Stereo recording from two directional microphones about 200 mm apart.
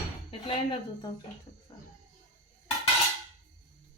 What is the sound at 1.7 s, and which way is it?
Roaring cats, 20° left (ahead or behind).